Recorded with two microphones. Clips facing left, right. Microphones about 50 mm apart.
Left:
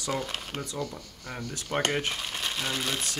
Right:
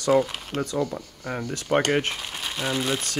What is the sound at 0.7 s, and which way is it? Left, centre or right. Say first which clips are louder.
Speech: right 8 dB; right.